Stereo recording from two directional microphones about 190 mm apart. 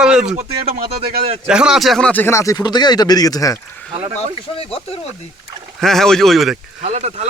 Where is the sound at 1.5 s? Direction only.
5° right (ahead or behind); by 3.8 s 15° left (ahead or behind).